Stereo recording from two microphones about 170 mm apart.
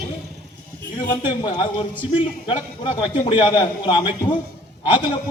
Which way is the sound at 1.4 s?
25° left (ahead or behind).